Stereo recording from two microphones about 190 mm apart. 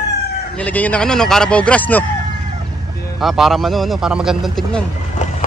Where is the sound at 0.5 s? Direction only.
10° left (ahead or behind).